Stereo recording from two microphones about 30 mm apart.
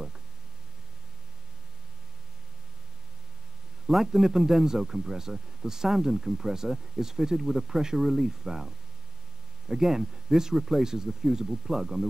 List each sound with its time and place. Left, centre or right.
4.0 s speech: centre